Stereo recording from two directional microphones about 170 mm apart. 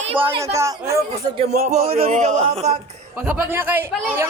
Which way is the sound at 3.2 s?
10° right (ahead or behind).